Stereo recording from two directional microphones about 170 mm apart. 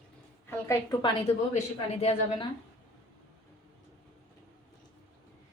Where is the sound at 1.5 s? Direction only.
35° left (ahead or behind).